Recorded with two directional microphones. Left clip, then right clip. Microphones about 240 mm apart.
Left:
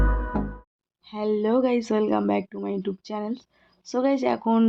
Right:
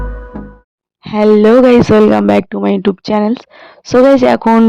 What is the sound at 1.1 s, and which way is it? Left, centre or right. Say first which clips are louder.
Speech: right 17 dB; right.